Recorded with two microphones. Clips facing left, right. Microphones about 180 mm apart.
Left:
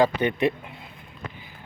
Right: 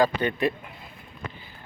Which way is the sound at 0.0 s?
20° left (ahead or behind).